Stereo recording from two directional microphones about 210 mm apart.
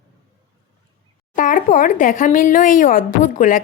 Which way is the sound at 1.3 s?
40° left (ahead or behind).